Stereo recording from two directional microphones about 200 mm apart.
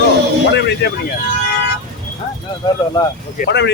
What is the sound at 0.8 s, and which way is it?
Speech, 55° left (ahead or behind).